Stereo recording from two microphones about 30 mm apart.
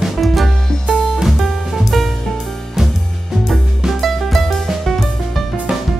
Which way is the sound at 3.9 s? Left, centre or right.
Centre.